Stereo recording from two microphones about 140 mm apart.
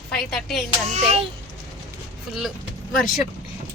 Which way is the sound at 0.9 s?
50° right (ahead or behind).